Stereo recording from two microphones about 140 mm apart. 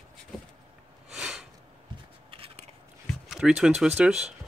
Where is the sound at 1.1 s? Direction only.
5° right (ahead or behind).